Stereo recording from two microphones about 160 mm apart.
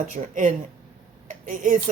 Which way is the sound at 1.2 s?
55° right (ahead or behind).